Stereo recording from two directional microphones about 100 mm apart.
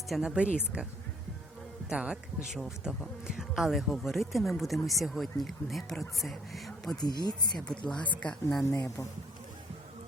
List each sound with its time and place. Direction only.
0.1 s speech: centre (ahead or behind)
1.9 s speech: 5° right (ahead or behind)
7.0 s speech: 45° left (ahead or behind)
7.7 s speech: 10° left (ahead or behind)
8.7 s speech: 35° left (ahead or behind)